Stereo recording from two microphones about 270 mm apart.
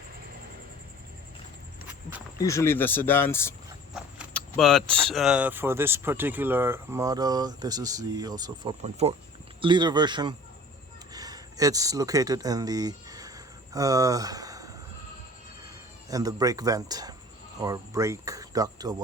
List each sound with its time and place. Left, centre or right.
2.4 s speech: centre
3.9 s keys jangling: centre
5.1 s speech: centre
11.1 s a sound: centre
15.6 s speech: centre